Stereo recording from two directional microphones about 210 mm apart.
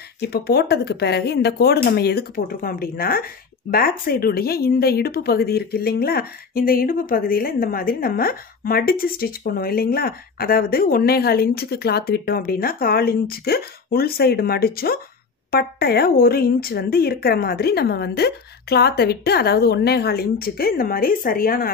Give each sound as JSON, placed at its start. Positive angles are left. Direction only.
{"t": 0.2, "sound": "speech", "side_deg": 50}